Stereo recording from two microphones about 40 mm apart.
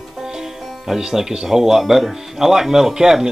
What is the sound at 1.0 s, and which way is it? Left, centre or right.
Speech, centre.